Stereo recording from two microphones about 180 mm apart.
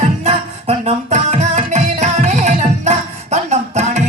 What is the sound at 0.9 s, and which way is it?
Music, 35° right (ahead or behind).